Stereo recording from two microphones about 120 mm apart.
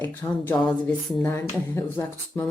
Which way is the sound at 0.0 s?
15° left (ahead or behind).